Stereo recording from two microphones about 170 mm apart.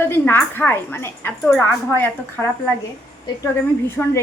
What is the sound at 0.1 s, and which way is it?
A woman's voice, 15° left (ahead or behind).